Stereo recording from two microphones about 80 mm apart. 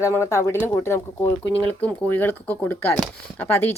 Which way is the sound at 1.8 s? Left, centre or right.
Centre.